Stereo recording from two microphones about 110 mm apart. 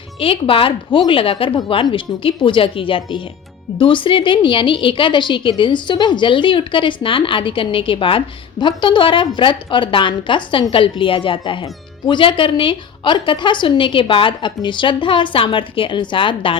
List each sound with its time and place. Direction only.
0.2 s a woman's voice: 55° left (ahead or behind)